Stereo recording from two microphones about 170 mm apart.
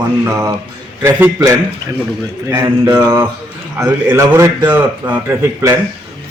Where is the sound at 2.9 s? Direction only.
25° right (ahead or behind).